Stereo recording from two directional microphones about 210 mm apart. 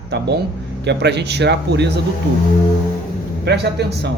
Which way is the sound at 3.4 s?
55° right (ahead or behind).